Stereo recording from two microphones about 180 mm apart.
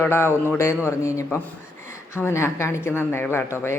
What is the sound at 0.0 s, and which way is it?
Speech, 15° left (ahead or behind).